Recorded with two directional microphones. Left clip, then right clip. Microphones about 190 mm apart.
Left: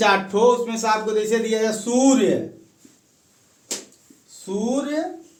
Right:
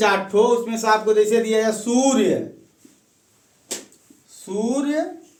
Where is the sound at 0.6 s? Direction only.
30° left (ahead or behind).